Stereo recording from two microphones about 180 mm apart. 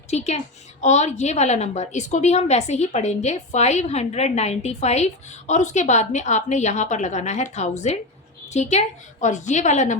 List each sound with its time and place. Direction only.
0.1 s a woman's voice: 35° left (ahead or behind)